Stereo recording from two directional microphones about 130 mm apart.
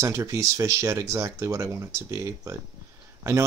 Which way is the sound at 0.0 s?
25° right (ahead or behind).